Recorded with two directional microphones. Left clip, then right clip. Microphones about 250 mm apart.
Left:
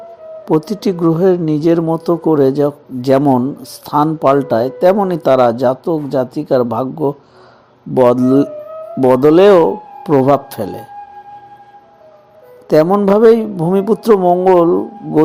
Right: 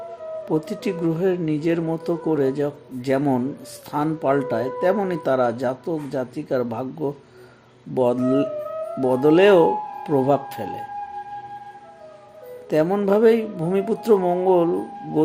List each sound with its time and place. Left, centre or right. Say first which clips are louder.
0.4 s speech: left 10 dB; left
12.8 s speech: left 7 dB; centre